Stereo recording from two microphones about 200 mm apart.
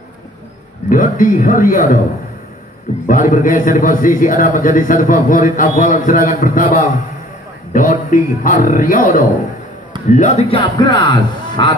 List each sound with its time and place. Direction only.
0.8 s a man's voice: 40° left (ahead or behind)
3.1 s a man's voice: 40° left (ahead or behind)
10.5 s speech: 25° left (ahead or behind)